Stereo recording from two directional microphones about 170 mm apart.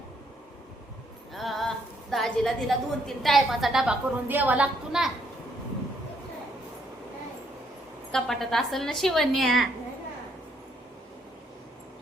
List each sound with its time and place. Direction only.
1.3 s a woman's voice: centre (ahead or behind)
8.1 s a woman's voice: centre (ahead or behind)